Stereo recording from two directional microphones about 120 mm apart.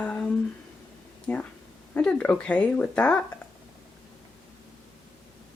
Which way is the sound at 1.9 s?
10° left (ahead or behind).